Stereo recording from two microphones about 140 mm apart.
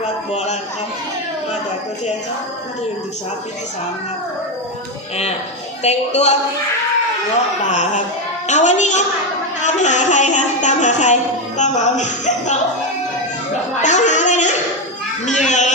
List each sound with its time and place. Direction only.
0.0 s a sound: 55° left (ahead or behind)
5.8 s a woman's voice: 50° left (ahead or behind)
7.7 s music: 60° left (ahead or behind)
13.8 s speech: 60° left (ahead or behind)
15.4 s music: 60° left (ahead or behind)